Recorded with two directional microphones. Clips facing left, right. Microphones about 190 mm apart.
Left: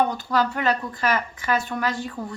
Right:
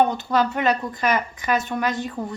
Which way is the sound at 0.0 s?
20° right (ahead or behind).